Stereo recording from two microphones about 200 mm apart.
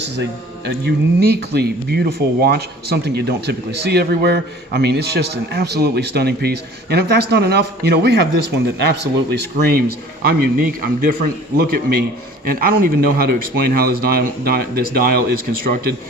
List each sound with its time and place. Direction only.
0.0 s speech: 60° right (ahead or behind)